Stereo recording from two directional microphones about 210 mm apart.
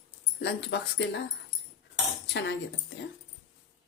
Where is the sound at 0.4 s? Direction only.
55° left (ahead or behind).